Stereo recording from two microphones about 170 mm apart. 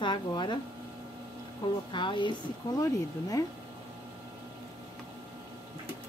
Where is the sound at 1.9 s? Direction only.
30° left (ahead or behind).